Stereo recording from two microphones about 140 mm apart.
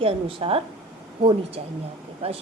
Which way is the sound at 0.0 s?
40° right (ahead or behind).